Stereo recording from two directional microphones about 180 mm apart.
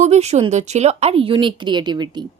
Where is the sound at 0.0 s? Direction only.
35° right (ahead or behind).